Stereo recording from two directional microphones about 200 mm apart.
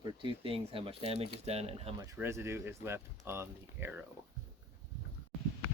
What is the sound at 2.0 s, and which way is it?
Speech, 15° right (ahead or behind).